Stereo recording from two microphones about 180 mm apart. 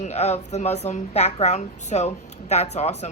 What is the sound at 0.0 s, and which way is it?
A woman's voice, 40° left (ahead or behind).